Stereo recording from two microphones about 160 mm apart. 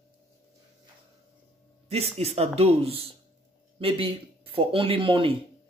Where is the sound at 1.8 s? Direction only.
40° right (ahead or behind).